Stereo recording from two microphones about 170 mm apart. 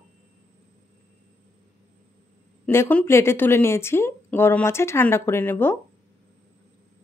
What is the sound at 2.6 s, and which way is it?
Speech, 10° left (ahead or behind).